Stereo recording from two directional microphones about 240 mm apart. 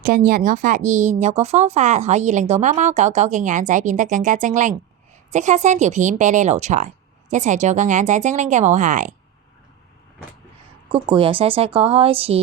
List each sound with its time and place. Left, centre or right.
0.0 s speech: right
10.8 s speech: right